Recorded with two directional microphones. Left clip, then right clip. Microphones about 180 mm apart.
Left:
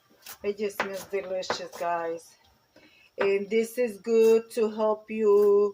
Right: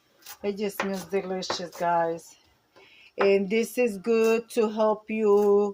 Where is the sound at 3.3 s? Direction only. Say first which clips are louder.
Right 2 dB; 60° right (ahead or behind).